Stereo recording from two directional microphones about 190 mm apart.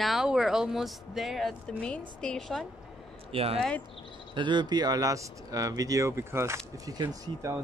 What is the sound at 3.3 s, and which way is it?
Speech, 30° right (ahead or behind).